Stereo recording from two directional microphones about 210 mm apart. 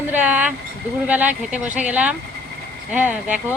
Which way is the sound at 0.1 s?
5° right (ahead or behind).